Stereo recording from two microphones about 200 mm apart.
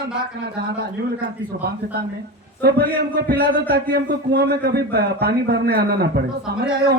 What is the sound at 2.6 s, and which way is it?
A man's voice, 55° right (ahead or behind).